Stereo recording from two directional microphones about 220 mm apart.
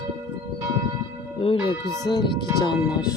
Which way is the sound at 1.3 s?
25° left (ahead or behind).